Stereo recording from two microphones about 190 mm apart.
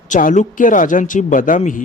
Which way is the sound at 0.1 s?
40° left (ahead or behind).